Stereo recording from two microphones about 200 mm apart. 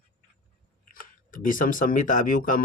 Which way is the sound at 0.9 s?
45° left (ahead or behind).